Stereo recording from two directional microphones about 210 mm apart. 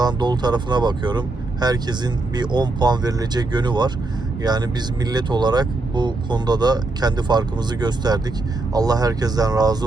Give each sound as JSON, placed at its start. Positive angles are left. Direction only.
{"t": 0.0, "sound": "speech", "side_deg": -20}